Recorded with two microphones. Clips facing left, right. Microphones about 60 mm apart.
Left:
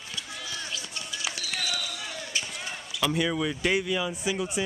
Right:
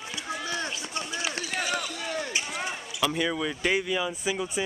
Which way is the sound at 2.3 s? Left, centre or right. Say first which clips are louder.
Right 3 dB; right.